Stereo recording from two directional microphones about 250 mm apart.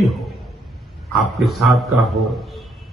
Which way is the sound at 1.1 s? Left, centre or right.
Centre.